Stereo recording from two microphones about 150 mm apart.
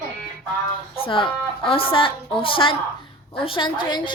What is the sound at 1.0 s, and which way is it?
A woman's voice, 35° left (ahead or behind).